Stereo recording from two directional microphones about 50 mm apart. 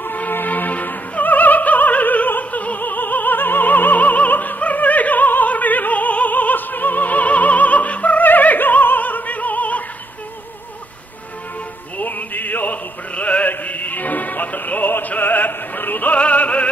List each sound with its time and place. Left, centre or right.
0.0 s opera: left
12.0 s opera: left
16.2 s music: left